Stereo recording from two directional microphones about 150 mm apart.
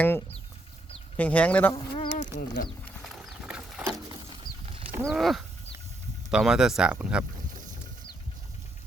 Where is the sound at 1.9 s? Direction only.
50° left (ahead or behind).